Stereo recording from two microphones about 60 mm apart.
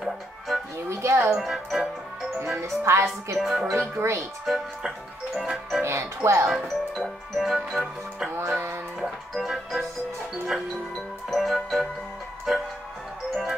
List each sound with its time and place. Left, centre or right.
0.8 s speech: right
1.3 s speech: centre
2.6 s speech: right
3.3 s speech: centre
4.0 s speech: right
4.5 s speech: centre
5.8 s speech: right
6.4 s speech: centre
8.5 s speech: right
9.0 s music: centre
11.2 s music: centre